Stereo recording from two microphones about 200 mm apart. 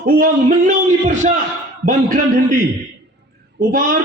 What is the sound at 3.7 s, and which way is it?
Speech, 45° right (ahead or behind).